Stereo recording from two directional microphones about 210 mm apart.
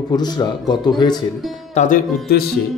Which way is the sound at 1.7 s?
40° left (ahead or behind).